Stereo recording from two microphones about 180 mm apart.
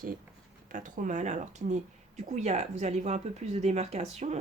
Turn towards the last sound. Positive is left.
turn(degrees=-40)  # may be behind; listen again after turning